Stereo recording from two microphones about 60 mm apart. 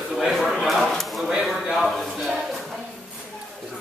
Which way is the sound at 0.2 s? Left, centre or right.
Centre.